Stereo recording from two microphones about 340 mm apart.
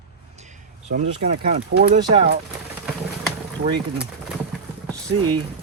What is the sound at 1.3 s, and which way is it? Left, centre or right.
Speech, right.